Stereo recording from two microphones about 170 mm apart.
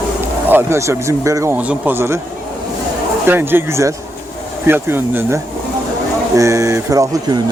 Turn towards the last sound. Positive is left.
turn(degrees=-20)  # may be behind; listen again after turning